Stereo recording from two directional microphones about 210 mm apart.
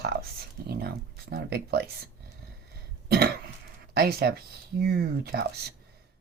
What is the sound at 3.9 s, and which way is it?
Speech, 50° right (ahead or behind).